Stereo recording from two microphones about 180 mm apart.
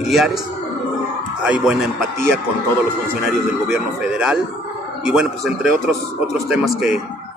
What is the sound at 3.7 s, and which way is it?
Speech, 5° right (ahead or behind).